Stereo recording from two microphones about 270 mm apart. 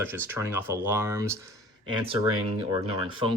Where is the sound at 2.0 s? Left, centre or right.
Right.